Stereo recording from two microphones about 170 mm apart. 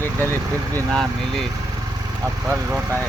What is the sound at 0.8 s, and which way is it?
Speech, 5° left (ahead or behind).